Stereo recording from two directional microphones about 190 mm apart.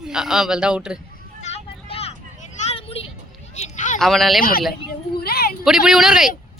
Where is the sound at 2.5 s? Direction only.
30° left (ahead or behind).